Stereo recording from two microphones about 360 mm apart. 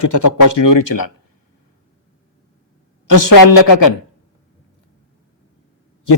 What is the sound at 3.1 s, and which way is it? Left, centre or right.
Speech, left.